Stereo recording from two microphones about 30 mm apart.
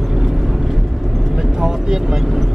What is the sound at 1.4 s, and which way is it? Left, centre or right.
Speech, right.